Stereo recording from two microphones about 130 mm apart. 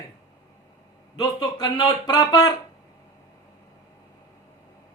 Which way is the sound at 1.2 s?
30° left (ahead or behind).